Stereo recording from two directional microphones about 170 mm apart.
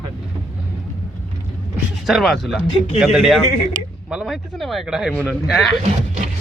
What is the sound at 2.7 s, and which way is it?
Speech, 30° left (ahead or behind).